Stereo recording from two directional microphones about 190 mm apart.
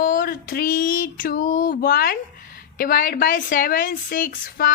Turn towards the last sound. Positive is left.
turn(degrees=50)  # may be behind; listen again after turning